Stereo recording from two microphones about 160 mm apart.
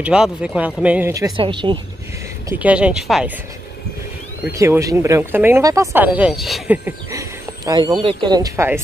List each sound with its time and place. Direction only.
0.0 s speech: 5° right (ahead or behind)
1.3 s speech: 30° right (ahead or behind)
2.6 s speech: 5° right (ahead or behind)
4.5 s speech: 15° right (ahead or behind); by 6.8 s centre (ahead or behind)
6.8 s speech: 20° right (ahead or behind)